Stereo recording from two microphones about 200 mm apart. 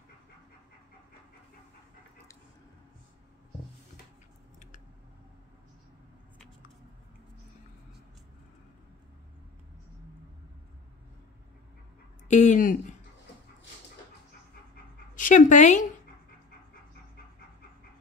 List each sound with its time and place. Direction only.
12.3 s speech: 35° left (ahead or behind)
15.1 s speech: 40° left (ahead or behind)